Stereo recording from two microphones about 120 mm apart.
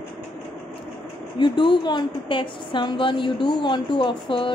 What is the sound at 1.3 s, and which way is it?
A woman's voice, 40° left (ahead or behind).